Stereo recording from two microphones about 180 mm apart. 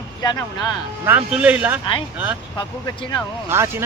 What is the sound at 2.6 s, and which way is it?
Speech, 25° left (ahead or behind).